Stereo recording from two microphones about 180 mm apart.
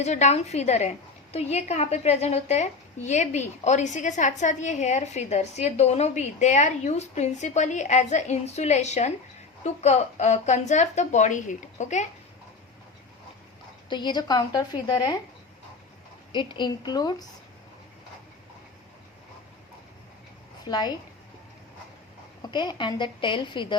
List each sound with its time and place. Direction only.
0.0 s a woman's voice: 40° left (ahead or behind)
13.9 s a woman's voice: 25° left (ahead or behind)
16.3 s a woman's voice: 25° left (ahead or behind)
20.7 s a woman's voice: 25° left (ahead or behind)
22.5 s a woman's voice: 25° left (ahead or behind)